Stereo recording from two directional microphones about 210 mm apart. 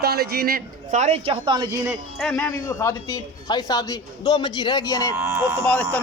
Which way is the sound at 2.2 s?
5° left (ahead or behind).